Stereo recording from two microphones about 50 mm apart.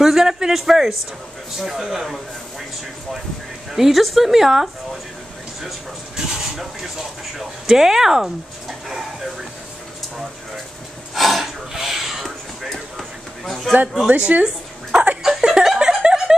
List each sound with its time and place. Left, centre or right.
0.0 s a woman's voice: centre
3.7 s a woman's voice: centre
6.1 s dog: centre
7.3 s speech: centre
11.1 s a sound: centre
12.6 s a sound: centre
13.7 s a man's voice: centre
14.0 s speech: right
15.2 s laughter: centre